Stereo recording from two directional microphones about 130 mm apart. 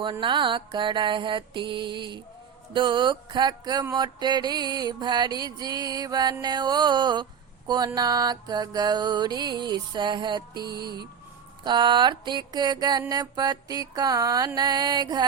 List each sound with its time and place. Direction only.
0.0 s music: 40° right (ahead or behind)